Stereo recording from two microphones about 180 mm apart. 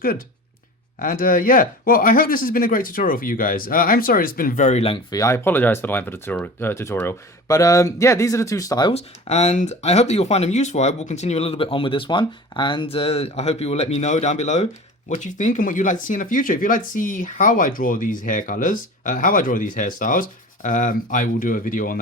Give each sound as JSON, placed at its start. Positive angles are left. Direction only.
{"t": 0.9, "sound": "speech", "side_deg": 50}
{"t": 5.1, "sound": "speech", "side_deg": 15}
{"t": 8.9, "sound": "speech", "side_deg": 35}